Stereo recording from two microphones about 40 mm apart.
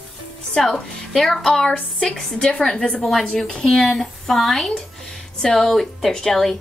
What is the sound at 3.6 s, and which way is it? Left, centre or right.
A woman's voice, centre.